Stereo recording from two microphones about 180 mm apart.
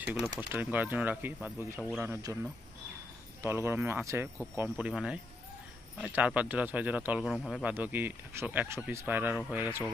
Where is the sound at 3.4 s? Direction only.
15° right (ahead or behind).